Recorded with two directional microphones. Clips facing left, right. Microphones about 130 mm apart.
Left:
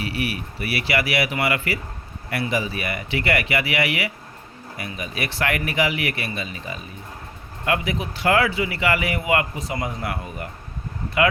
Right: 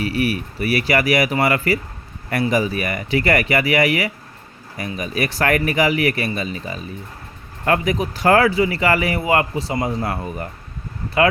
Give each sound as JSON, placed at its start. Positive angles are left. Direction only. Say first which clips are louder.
{"t": 0.0, "sound": "speech", "louder": "right 6 dB", "side_deg": -40}